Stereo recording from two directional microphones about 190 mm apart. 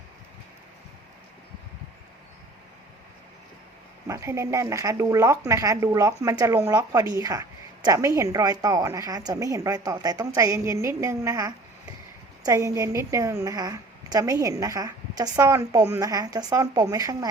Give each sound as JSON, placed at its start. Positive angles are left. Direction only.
{"t": 4.0, "sound": "speech", "side_deg": -15}